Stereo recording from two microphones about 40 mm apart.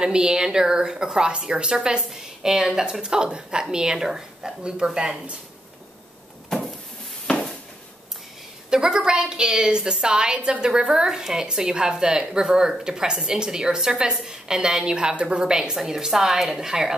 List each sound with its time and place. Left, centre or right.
0.0 s a woman's voice: right
8.6 s a woman's voice: centre